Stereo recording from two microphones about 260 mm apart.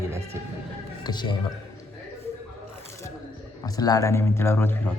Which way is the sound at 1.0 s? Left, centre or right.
Centre.